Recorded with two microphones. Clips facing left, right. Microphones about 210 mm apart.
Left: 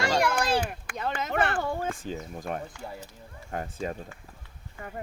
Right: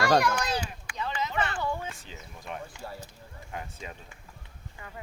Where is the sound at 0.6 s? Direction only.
55° left (ahead or behind).